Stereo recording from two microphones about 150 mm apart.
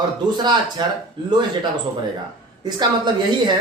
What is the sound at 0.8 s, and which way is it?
Speech, 30° right (ahead or behind).